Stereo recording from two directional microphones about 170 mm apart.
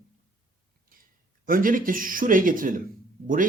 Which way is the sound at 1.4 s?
55° right (ahead or behind).